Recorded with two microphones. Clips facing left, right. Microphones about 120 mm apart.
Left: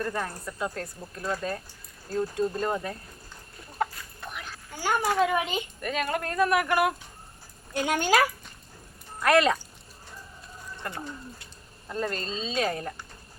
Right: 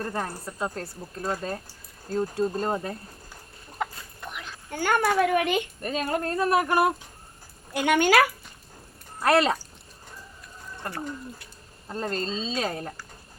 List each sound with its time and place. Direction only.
0.0 s speech: 30° right (ahead or behind)
3.9 s chicken: 20° right (ahead or behind)
4.7 s speech: 60° right (ahead or behind)
5.8 s speech: 30° right (ahead or behind)
7.7 s speech: 65° right (ahead or behind)
9.2 s speech: 30° right (ahead or behind)
11.9 s speech: 30° right (ahead or behind)